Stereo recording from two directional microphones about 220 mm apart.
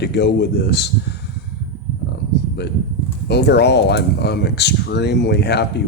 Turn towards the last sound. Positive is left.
turn(degrees=50)  # may be behind; listen again after turning